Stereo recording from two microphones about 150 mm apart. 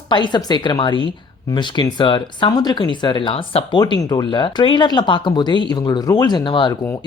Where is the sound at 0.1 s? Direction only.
30° left (ahead or behind).